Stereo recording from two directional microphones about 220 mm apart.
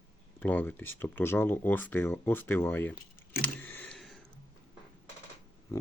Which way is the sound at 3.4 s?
10° left (ahead or behind).